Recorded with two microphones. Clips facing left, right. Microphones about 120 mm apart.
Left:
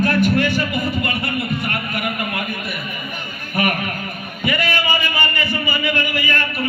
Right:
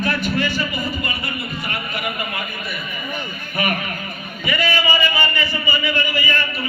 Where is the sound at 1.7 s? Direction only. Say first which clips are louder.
Left 2 dB; 55° left (ahead or behind).